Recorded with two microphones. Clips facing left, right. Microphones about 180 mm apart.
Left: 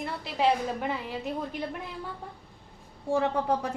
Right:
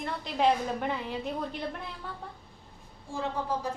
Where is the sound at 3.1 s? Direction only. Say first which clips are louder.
Left 6 dB; 70° left (ahead or behind).